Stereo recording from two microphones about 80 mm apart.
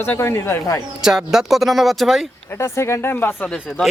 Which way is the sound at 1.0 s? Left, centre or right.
Centre.